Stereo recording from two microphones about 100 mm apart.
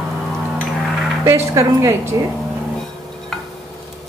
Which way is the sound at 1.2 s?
30° right (ahead or behind).